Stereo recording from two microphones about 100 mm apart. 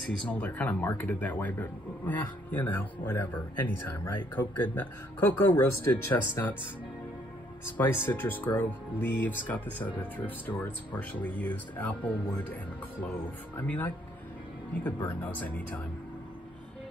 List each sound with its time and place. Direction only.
0.3 s speech: 15° left (ahead or behind)
7.7 s speech: 20° left (ahead or behind)
13.6 s speech: 20° left (ahead or behind)